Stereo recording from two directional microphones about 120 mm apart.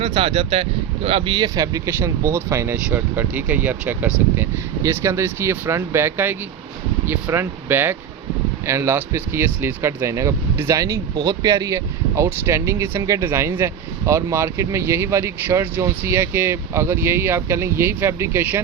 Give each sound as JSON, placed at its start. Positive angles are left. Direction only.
{"t": 0.0, "sound": "speech", "side_deg": -50}
{"t": 1.5, "sound": "speech", "side_deg": -30}